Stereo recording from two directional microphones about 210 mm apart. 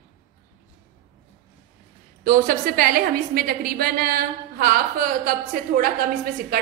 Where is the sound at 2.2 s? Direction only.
40° right (ahead or behind).